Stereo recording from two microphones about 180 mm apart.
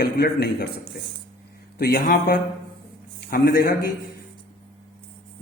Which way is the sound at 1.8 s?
60° left (ahead or behind).